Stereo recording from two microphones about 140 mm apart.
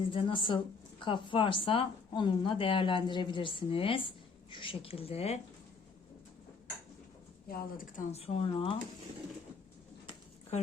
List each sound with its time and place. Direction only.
0.1 s speech: 40° left (ahead or behind)
7.4 s speech: 90° left
8.1 s speech: 45° left (ahead or behind)